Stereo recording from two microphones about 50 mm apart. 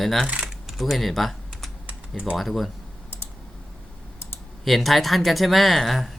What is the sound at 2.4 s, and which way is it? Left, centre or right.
Speech, centre.